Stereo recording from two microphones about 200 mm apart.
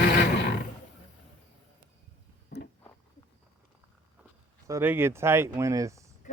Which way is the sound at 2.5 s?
55° left (ahead or behind).